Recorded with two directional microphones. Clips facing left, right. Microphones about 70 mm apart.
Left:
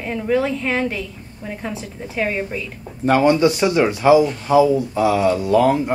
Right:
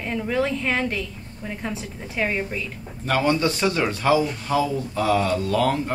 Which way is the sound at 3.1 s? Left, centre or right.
Centre.